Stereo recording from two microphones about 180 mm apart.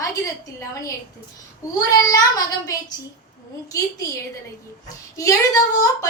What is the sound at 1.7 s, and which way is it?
A child's voice, 20° left (ahead or behind).